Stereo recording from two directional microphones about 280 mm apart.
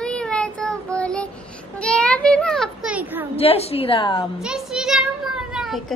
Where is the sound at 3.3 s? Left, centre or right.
Left.